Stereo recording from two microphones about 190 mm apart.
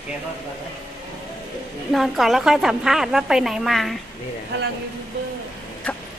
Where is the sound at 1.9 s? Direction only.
Centre (ahead or behind).